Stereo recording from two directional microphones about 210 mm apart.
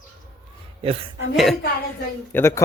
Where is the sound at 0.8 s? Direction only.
25° right (ahead or behind).